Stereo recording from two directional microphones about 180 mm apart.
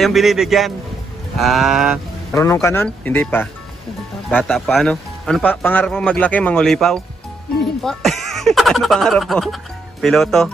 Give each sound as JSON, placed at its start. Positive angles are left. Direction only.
{"t": 0.0, "sound": "speech", "side_deg": 0}
{"t": 2.5, "sound": "speech", "side_deg": 15}